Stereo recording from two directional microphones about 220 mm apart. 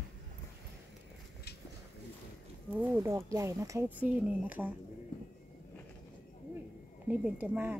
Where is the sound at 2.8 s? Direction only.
10° right (ahead or behind).